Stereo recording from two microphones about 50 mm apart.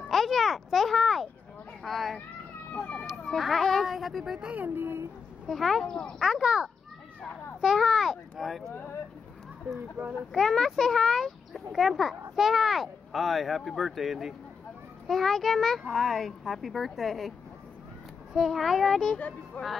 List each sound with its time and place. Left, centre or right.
0.1 s a child's voice: centre
2.7 s speech: left
3.3 s speech: centre
4.6 s speech: right
5.5 s speech: centre
5.9 s speech: centre
6.1 s speech: centre
6.4 s a child's voice: centre
7.6 s speech: centre
9.8 s speech: right
10.3 s speech: centre
18.3 s speech: centre
19.1 s speech: left